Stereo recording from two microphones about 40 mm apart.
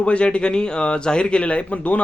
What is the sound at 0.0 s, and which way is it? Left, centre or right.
A man's voice, left.